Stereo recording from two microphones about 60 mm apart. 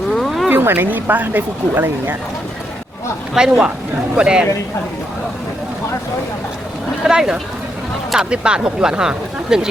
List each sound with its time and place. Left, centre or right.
0.1 s a sound: centre
0.5 s speech: right
3.4 s speech: centre
7.0 s speech: centre